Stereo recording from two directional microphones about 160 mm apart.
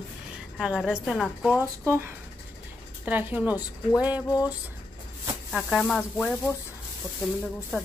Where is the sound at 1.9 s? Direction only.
15° right (ahead or behind).